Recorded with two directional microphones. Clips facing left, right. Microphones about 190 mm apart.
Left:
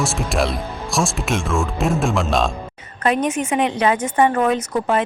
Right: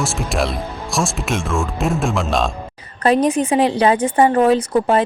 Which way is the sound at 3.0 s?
35° right (ahead or behind).